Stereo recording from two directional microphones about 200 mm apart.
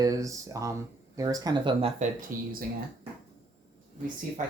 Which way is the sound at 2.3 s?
45° right (ahead or behind).